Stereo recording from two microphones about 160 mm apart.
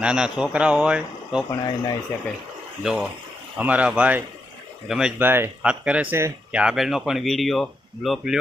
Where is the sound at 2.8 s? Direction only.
5° right (ahead or behind).